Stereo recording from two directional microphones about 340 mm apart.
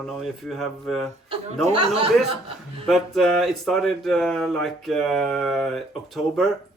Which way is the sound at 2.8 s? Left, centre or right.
Centre.